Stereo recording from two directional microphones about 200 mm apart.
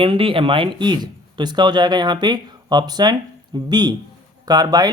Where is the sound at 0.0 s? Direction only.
25° right (ahead or behind).